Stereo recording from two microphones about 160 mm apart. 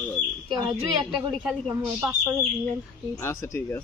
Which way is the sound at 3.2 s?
15° left (ahead or behind).